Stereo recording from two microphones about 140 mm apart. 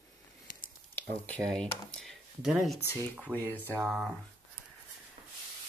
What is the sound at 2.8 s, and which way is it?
Speech, 15° left (ahead or behind).